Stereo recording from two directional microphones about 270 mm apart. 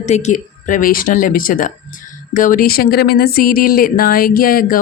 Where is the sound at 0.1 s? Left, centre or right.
Left.